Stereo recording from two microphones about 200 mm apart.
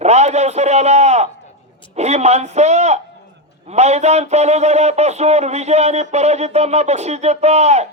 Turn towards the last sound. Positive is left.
turn(degrees=-35)  # may be behind; listen again after turning